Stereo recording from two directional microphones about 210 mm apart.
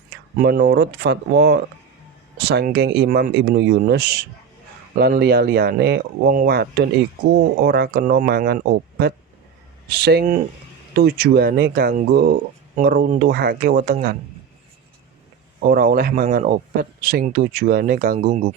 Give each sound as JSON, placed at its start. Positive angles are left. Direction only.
{"t": 0.3, "sound": "speech", "side_deg": -45}
{"t": 15.6, "sound": "speech", "side_deg": -45}